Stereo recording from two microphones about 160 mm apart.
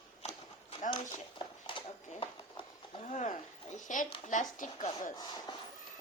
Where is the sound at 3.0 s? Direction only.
50° left (ahead or behind).